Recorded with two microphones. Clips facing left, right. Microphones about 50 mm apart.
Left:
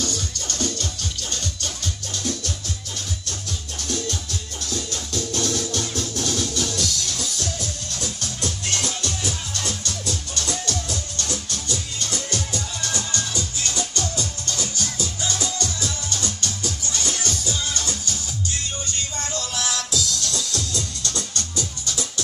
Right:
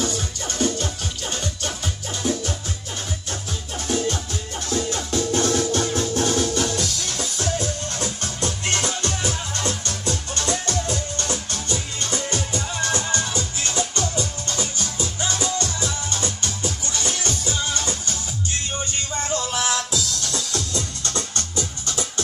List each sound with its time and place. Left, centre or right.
0.0 s music: centre
3.8 s music: right
19.2 s music: centre